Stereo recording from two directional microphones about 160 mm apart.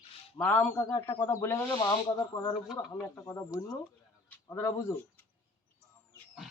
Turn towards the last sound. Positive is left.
turn(degrees=20)  # may be behind; listen again after turning